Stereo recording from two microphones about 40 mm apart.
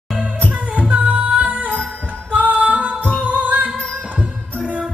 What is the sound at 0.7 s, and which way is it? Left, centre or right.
Music, right.